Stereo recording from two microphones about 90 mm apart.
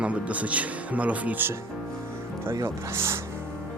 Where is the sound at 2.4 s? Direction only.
30° right (ahead or behind).